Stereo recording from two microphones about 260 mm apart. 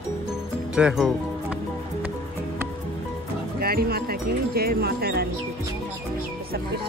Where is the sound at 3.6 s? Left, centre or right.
Right.